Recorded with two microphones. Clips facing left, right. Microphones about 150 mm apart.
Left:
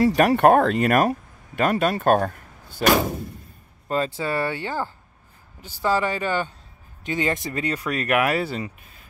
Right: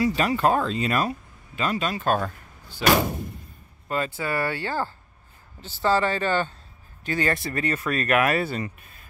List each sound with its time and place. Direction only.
0.1 s speech: 60° left (ahead or behind)
2.8 s door: 45° left (ahead or behind)
3.9 s speech: 30° left (ahead or behind); by 8.7 s 15° left (ahead or behind)